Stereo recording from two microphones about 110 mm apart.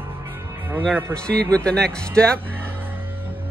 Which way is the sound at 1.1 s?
10° left (ahead or behind).